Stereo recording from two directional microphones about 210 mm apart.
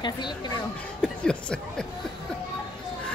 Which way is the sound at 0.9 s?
5° left (ahead or behind).